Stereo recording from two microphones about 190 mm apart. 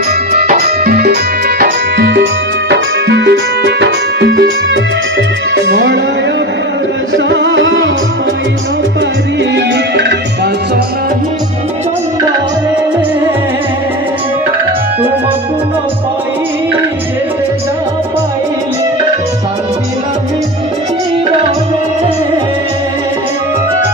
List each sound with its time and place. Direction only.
0.3 s music: 50° right (ahead or behind)
5.7 s music: 65° right (ahead or behind)
7.2 s music: 70° right (ahead or behind)